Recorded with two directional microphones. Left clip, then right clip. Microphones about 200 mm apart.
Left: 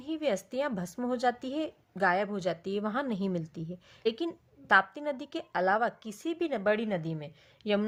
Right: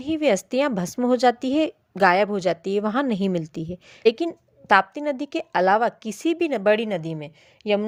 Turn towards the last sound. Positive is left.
turn(degrees=-35)  # may be behind; listen again after turning